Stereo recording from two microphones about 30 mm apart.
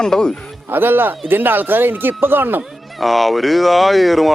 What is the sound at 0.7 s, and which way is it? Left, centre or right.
Speech, right.